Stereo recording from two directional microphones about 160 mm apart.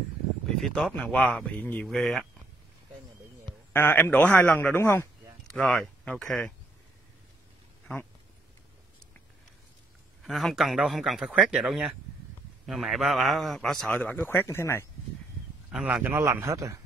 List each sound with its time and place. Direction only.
0.5 s a man's voice: 5° left (ahead or behind)
3.7 s a man's voice: 10° left (ahead or behind)
10.2 s a man's voice: centre (ahead or behind); by 14.9 s 15° left (ahead or behind)
15.7 s a man's voice: 5° right (ahead or behind)